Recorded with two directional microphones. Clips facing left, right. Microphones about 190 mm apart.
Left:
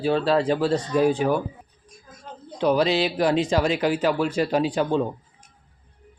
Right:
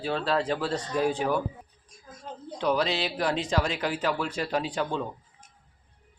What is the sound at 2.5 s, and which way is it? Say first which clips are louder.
Speech: left 6 dB; 10° left (ahead or behind).